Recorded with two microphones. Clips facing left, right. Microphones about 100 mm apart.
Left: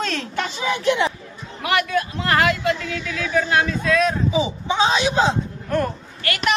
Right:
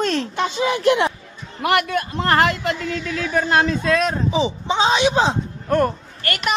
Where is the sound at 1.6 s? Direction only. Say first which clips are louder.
Right 2 dB; 50° right (ahead or behind).